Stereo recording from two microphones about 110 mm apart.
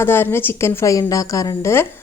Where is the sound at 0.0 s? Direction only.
20° left (ahead or behind).